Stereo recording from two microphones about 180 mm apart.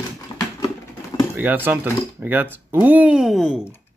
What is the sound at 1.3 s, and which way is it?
Speech, 10° right (ahead or behind).